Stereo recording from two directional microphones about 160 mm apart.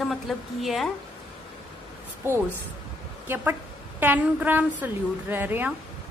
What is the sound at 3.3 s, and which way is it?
A woman's voice, 10° right (ahead or behind).